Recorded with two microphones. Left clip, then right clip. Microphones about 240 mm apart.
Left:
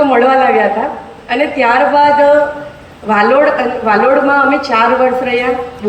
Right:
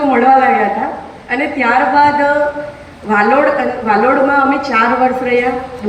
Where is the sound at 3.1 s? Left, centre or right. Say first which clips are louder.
Left 2 dB; left.